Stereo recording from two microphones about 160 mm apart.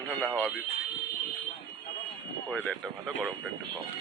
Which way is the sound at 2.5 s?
5° left (ahead or behind).